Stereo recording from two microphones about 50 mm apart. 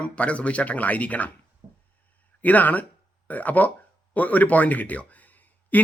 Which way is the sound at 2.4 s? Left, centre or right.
Left.